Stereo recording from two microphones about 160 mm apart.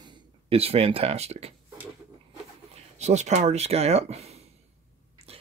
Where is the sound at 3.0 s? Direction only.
45° right (ahead or behind).